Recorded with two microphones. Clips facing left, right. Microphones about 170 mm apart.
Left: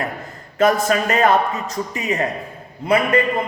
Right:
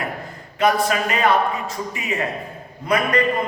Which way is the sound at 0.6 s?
45° left (ahead or behind).